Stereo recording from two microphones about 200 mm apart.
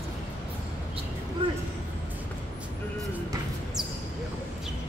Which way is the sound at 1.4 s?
25° right (ahead or behind).